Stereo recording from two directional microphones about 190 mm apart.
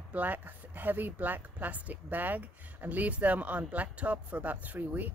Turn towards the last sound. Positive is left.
turn(degrees=-10)  # may be behind; listen again after turning